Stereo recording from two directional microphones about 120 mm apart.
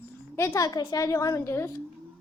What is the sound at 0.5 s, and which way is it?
A woman's voice, 35° left (ahead or behind).